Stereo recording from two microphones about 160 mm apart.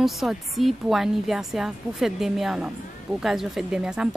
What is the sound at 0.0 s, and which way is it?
Speech, centre (ahead or behind).